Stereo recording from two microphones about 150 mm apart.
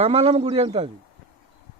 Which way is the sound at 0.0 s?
40° right (ahead or behind).